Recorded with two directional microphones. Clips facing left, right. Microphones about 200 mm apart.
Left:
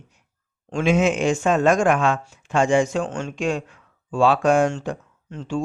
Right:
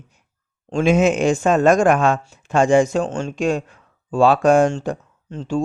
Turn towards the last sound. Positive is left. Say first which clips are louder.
# right 4 dB
turn(degrees=-35)  # may be behind; listen again after turning